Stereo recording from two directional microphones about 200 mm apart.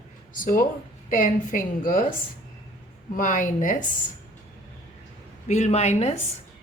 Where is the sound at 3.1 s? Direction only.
40° left (ahead or behind).